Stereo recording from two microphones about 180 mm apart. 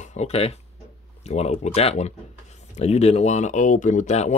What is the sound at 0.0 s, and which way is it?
Speech, 40° left (ahead or behind).